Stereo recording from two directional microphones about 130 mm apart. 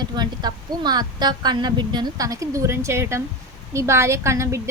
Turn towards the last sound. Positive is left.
turn(degrees=-20)  # may be behind; listen again after turning